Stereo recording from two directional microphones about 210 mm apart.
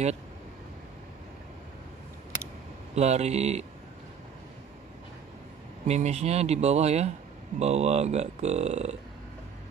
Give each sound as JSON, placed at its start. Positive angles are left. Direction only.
{"t": 2.9, "sound": "speech", "side_deg": -30}
{"t": 5.9, "sound": "speech", "side_deg": -30}